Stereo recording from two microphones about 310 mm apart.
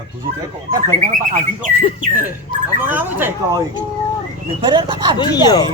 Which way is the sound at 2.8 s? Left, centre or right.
Centre.